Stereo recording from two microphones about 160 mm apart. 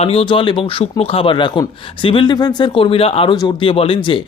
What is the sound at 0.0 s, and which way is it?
Speech, 35° left (ahead or behind).